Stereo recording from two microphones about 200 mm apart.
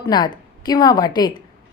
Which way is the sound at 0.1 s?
20° left (ahead or behind).